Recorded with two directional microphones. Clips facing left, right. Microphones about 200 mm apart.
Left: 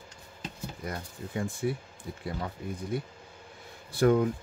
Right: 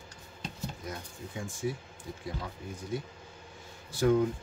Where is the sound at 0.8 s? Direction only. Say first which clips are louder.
Left 3 dB; 60° left (ahead or behind).